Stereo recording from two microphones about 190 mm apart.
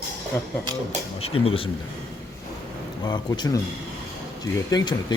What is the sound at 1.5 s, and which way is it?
Speech, 30° left (ahead or behind).